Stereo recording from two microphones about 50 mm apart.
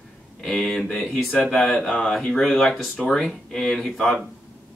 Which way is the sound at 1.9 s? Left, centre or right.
Centre.